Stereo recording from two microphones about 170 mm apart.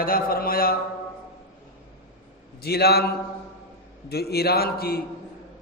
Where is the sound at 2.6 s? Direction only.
70° left (ahead or behind).